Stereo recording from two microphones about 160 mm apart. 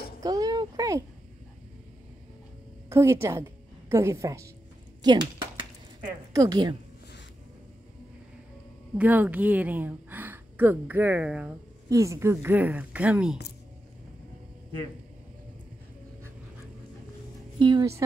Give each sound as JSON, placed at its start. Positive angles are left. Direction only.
{"t": 0.2, "sound": "a sound", "side_deg": -25}
{"t": 2.9, "sound": "a woman's voice", "side_deg": -15}
{"t": 5.0, "sound": "a sound", "side_deg": -30}
{"t": 6.3, "sound": "a woman's voice", "side_deg": -25}
{"t": 8.9, "sound": "a woman's voice", "side_deg": -10}
{"t": 11.9, "sound": "a woman's voice", "side_deg": -20}
{"t": 17.6, "sound": "speech", "side_deg": -30}